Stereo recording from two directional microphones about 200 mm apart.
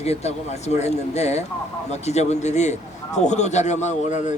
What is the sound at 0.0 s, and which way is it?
Speech, 30° left (ahead or behind).